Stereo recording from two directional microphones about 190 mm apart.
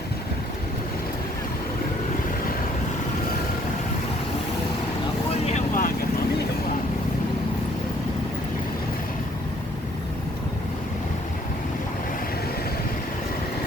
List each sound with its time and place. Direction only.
5.5 s vehicle: 40° left (ahead or behind)